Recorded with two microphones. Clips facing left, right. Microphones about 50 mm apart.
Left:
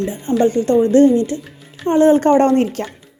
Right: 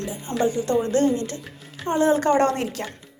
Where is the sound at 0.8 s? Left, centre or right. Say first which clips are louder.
Left 9 dB; left.